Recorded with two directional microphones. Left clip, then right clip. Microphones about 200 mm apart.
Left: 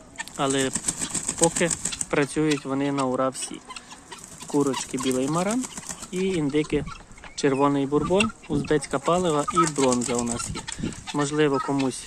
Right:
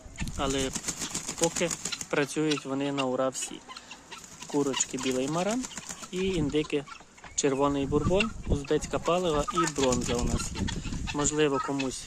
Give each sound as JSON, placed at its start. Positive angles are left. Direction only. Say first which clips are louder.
{"t": 0.3, "sound": "bird flight", "louder": "left 6 dB", "side_deg": 5}
{"t": 2.0, "sound": "speech", "louder": "left 5 dB", "side_deg": 0}
{"t": 4.8, "sound": "speech", "louder": "left 4 dB", "side_deg": 0}
{"t": 10.3, "sound": "chicken", "louder": "left 2 dB", "side_deg": 45}
{"t": 11.2, "sound": "speech", "louder": "left 4 dB", "side_deg": 0}